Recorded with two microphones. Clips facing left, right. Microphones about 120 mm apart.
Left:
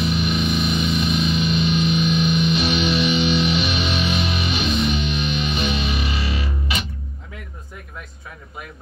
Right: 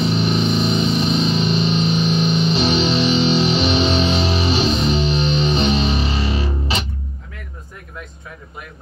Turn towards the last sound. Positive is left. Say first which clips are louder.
# right 4 dB
turn(degrees=-30)  # may be behind; listen again after turning